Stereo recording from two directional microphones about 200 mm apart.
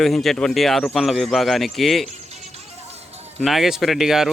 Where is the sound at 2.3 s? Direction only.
30° right (ahead or behind).